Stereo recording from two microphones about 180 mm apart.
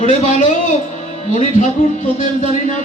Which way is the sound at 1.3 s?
45° left (ahead or behind).